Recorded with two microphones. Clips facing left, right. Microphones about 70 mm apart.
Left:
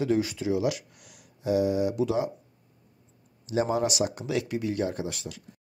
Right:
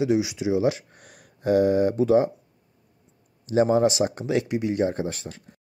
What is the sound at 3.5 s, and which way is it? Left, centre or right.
Speech, right.